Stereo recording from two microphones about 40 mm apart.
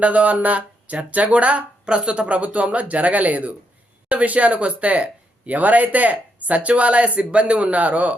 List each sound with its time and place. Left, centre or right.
0.0 s speech: right